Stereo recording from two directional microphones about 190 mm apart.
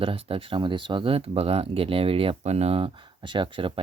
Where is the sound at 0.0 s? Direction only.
30° right (ahead or behind).